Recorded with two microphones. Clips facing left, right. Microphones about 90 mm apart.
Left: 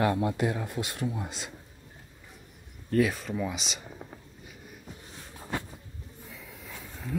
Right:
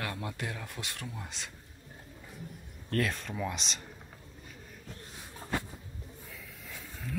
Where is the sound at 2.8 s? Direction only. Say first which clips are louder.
Left 6 dB; 5° left (ahead or behind).